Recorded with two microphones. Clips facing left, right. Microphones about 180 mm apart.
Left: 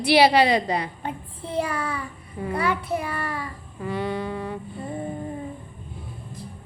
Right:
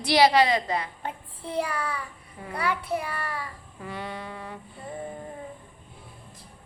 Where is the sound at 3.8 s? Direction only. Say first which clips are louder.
Left 9 dB; 25° left (ahead or behind).